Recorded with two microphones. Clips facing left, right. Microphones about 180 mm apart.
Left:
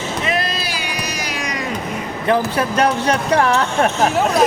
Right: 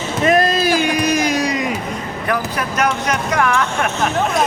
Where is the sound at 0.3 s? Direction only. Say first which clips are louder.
Right 11 dB; 45° right (ahead or behind).